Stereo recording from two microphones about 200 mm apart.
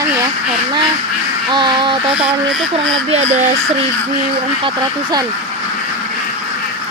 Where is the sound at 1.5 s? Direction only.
25° right (ahead or behind).